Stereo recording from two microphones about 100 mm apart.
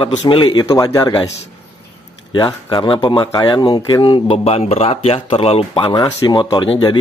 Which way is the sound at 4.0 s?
65° left (ahead or behind).